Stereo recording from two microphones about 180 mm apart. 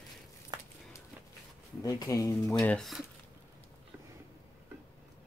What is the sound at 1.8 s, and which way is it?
Speech, 20° left (ahead or behind).